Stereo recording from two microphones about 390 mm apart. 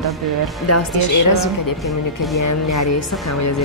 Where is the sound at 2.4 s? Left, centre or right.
Left.